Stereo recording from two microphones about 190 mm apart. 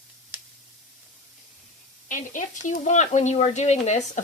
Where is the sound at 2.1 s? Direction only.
45° left (ahead or behind).